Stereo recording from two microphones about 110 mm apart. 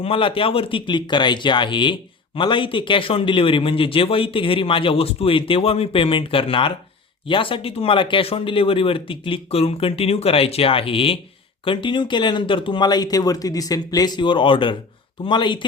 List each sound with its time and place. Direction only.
0.0 s speech: 55° left (ahead or behind)